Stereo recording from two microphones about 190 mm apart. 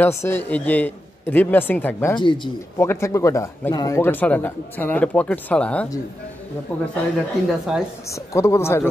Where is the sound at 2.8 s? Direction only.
15° left (ahead or behind).